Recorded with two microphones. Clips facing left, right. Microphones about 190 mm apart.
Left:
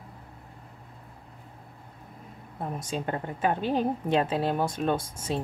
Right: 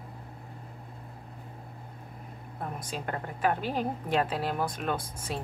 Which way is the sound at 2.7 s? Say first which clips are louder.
Left 5 dB; 25° left (ahead or behind).